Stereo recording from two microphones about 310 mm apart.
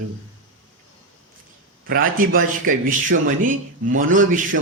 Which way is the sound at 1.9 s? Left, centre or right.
Right.